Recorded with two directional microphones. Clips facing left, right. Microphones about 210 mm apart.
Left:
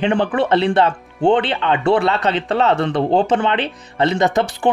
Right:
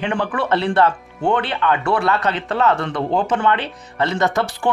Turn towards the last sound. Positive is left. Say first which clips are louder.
# left 3 dB
turn(degrees=15)  # may be behind; listen again after turning